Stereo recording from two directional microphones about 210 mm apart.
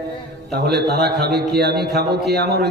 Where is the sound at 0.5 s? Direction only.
50° right (ahead or behind).